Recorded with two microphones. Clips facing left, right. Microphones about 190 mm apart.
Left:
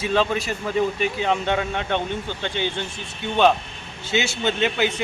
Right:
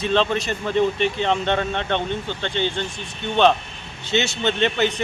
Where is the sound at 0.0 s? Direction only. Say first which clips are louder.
Right 1 dB; 5° left (ahead or behind).